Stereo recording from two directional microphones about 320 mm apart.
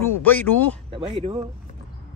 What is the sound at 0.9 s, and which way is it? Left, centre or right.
Speech, centre.